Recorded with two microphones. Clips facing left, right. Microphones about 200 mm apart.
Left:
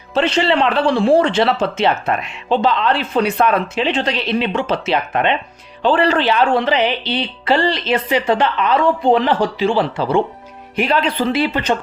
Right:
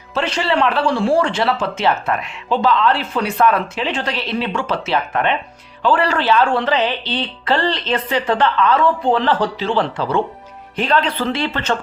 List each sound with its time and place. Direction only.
0.1 s a woman's voice: 25° left (ahead or behind)